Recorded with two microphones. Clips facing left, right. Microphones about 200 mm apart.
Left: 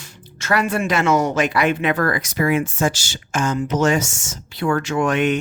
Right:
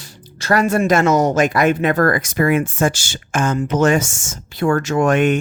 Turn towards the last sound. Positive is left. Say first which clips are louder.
# right 3 dB
turn(degrees=-50)  # may be behind; listen again after turning